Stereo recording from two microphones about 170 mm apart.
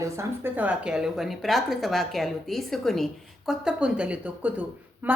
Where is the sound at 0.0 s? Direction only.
15° right (ahead or behind).